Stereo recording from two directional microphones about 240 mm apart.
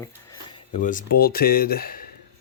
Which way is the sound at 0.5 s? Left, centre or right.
Left.